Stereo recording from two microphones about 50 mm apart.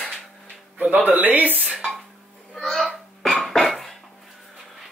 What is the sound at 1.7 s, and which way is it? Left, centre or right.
Speech, centre.